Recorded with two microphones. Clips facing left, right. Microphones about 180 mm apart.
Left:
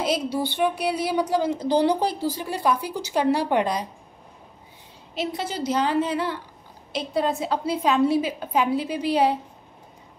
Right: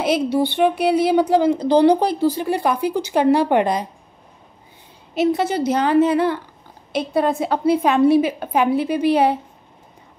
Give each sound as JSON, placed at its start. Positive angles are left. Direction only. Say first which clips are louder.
{"t": 0.0, "sound": "a woman's voice", "louder": "right 6 dB", "side_deg": -60}
{"t": 5.1, "sound": "a woman's voice", "louder": "right 10 dB", "side_deg": -55}